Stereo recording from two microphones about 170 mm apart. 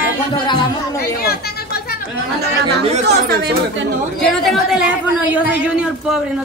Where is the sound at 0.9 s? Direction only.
65° left (ahead or behind).